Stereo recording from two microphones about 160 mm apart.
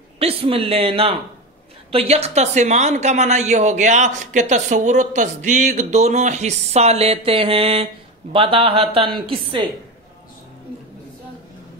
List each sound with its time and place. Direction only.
0.2 s a man's voice: 35° right (ahead or behind)